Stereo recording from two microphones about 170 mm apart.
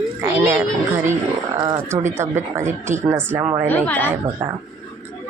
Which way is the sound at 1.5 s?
25° right (ahead or behind).